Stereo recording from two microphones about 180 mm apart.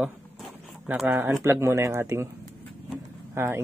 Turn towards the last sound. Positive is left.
turn(degrees=-15)  # may be behind; listen again after turning